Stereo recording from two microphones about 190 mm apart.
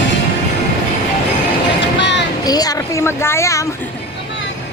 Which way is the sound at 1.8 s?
65° left (ahead or behind).